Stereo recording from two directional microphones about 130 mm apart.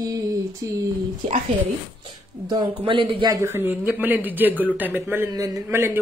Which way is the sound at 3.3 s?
20° right (ahead or behind).